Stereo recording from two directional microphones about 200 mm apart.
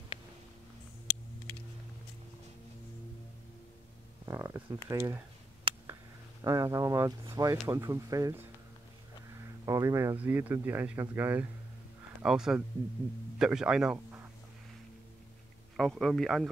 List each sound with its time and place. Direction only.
4.3 s speech: 10° right (ahead or behind)
5.7 s a sound: 25° right (ahead or behind)
6.4 s speech: 15° right (ahead or behind)
9.7 s speech: 15° right (ahead or behind)
15.7 s speech: centre (ahead or behind)